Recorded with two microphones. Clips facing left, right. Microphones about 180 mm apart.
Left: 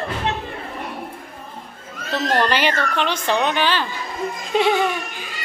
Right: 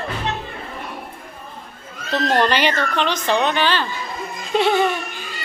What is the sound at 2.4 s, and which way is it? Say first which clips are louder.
A woman's voice: right 1 dB; 5° left (ahead or behind).